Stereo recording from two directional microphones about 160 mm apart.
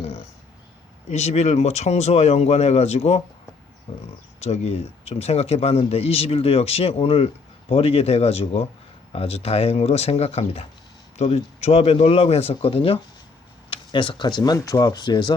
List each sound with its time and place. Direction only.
0.0 s a sound: 40° left (ahead or behind)
1.1 s speech: 40° left (ahead or behind)
4.4 s speech: 40° left (ahead or behind)